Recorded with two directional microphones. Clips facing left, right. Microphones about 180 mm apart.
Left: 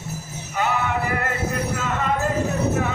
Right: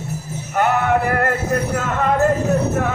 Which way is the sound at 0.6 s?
55° right (ahead or behind).